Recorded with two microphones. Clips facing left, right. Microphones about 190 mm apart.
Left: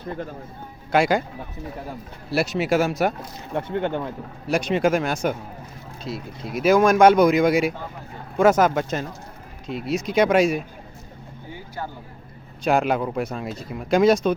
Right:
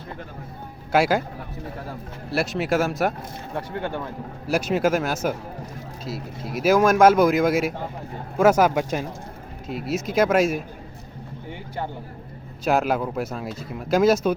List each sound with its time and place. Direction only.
0.9 s speech: 5° right (ahead or behind)
2.3 s speech: centre (ahead or behind)
3.5 s speech: 20° left (ahead or behind)
4.4 s speech: 5° right (ahead or behind)
12.6 s speech: 5° right (ahead or behind)